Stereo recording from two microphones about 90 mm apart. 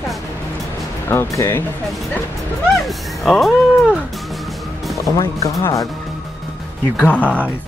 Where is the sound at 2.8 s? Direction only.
Centre (ahead or behind).